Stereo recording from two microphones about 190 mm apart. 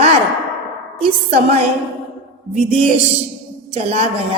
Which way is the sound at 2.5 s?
30° right (ahead or behind).